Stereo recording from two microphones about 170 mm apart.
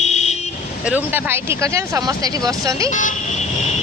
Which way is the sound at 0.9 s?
10° right (ahead or behind).